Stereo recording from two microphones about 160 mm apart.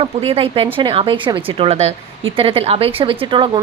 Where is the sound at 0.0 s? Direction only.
35° right (ahead or behind).